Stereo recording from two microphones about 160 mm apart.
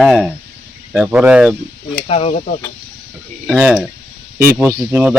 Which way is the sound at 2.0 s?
40° left (ahead or behind).